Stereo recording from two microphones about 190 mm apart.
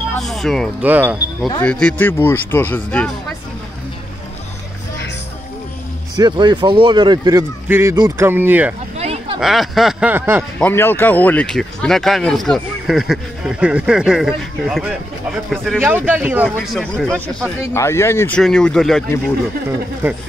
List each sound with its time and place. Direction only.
0.1 s speech: centre (ahead or behind)
0.8 s speech: 10° right (ahead or behind)
1.6 s speech: 5° left (ahead or behind)
6.1 s speech: 25° right (ahead or behind)
7.9 s speech: 20° right (ahead or behind)
8.3 s speech: 10° right (ahead or behind)
8.9 s a sound: 35° right (ahead or behind)
9.4 s speech: centre (ahead or behind)
10.6 s speech: 10° left (ahead or behind)
15.8 s speech: 10° right (ahead or behind)
16.5 s speech: 5° left (ahead or behind)
20.0 s speech: 10° right (ahead or behind)